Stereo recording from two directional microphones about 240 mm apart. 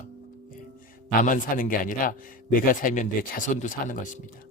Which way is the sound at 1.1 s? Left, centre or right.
Left.